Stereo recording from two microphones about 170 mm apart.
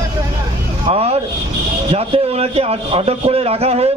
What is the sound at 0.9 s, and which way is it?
A man's voice, 35° right (ahead or behind).